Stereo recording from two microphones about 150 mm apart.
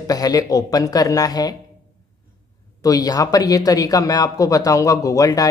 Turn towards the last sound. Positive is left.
turn(degrees=25)  # may be behind; listen again after turning